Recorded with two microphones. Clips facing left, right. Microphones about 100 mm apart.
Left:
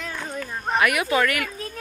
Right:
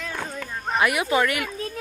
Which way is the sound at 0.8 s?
25° right (ahead or behind).